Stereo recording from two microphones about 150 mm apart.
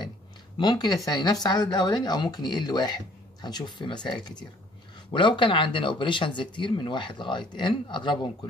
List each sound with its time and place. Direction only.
0.6 s speech: 25° left (ahead or behind)